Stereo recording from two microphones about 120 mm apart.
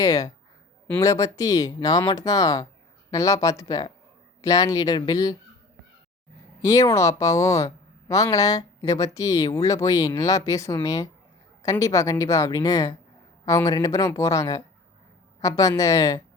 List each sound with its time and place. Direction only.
0.0 s a woman's voice: 30° left (ahead or behind)
6.6 s a woman's voice: 25° left (ahead or behind)